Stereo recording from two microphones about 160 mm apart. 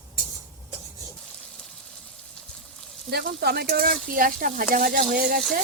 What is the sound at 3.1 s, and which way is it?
Frying, 85° right.